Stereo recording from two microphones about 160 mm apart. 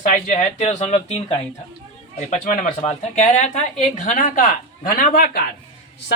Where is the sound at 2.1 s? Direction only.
50° left (ahead or behind).